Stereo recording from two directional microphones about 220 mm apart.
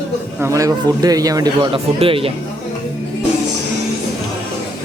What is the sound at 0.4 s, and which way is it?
A man's voice, 15° right (ahead or behind).